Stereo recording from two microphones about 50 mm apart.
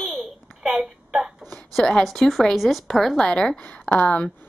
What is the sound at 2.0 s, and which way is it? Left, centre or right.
Speech, centre.